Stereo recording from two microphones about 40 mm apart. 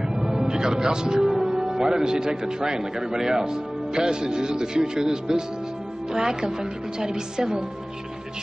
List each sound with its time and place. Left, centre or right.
0.1 s a man's voice: centre